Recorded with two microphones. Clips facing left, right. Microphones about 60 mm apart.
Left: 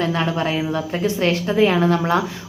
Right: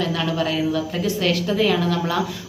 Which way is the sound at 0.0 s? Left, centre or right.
Left.